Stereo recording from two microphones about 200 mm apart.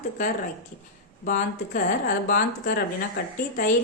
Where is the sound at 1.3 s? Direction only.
40° left (ahead or behind).